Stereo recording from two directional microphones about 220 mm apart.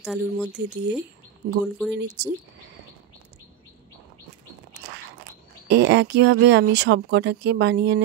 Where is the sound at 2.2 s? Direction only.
50° right (ahead or behind).